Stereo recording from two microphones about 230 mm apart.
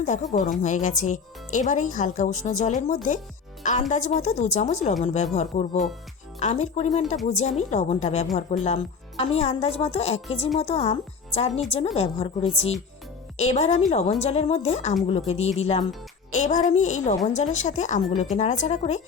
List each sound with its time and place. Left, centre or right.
0.0 s a woman's voice: left